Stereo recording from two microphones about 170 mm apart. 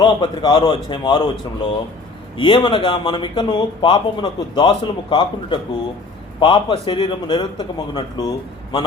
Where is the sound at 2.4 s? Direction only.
30° left (ahead or behind).